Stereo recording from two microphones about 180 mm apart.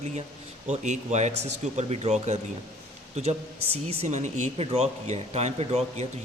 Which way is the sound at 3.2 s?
40° right (ahead or behind).